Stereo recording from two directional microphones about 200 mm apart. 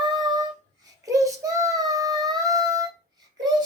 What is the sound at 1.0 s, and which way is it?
Child singing, 15° right (ahead or behind).